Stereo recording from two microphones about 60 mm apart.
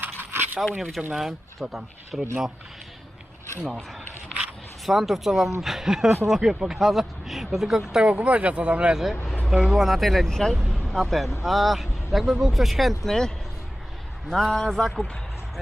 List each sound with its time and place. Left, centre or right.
0.0 s a sound: right
0.8 s speech: centre
4.9 s speech: centre
8.0 s speech: right
9.5 s speech: centre